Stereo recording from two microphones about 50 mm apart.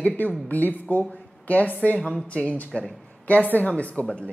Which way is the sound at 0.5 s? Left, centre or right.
Left.